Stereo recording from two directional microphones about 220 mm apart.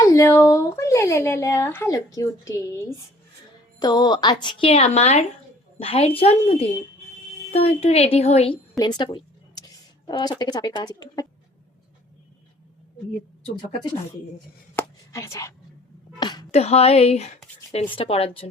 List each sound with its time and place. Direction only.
0.0 s speech: 15° left (ahead or behind)
3.8 s speech: 20° left (ahead or behind)
14.8 s chopping: 15° left (ahead or behind)
16.2 s a sound: 20° left (ahead or behind)
16.5 s speech: 30° left (ahead or behind)